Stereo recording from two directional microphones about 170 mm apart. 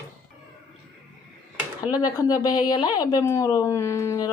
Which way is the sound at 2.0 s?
20° left (ahead or behind).